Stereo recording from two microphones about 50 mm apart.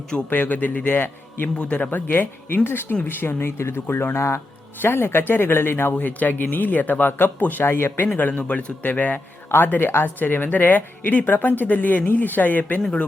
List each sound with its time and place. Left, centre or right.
0.3 s speech: left
0.9 s a man's voice: left
1.5 s a man's voice: left
1.9 s speech: left
4.8 s speech: left
5.9 s speech: left
8.0 s speech: left